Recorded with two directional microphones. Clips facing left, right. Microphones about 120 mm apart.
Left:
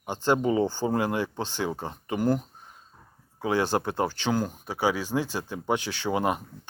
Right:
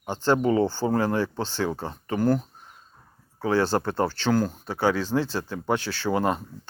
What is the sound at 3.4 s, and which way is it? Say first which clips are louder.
Speech: right 2 dB; 15° left (ahead or behind).